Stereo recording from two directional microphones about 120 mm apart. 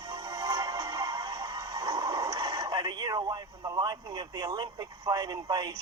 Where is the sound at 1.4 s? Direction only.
30° right (ahead or behind).